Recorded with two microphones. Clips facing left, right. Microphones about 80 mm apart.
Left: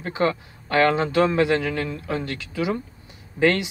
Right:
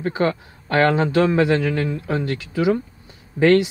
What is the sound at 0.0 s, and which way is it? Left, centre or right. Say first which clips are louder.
Speech: right 2 dB; right.